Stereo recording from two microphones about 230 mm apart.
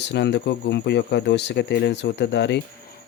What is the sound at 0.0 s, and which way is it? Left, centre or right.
Speech, left.